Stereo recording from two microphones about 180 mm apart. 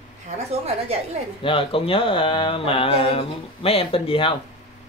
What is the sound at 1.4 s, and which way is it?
Speech, 30° left (ahead or behind).